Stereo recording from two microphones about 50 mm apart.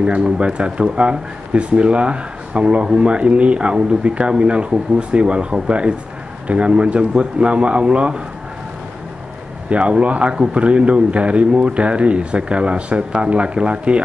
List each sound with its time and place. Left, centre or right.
0.0 s speech: right
9.7 s speech: right